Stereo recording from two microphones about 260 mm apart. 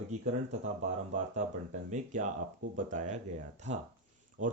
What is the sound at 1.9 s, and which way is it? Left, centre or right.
Speech, right.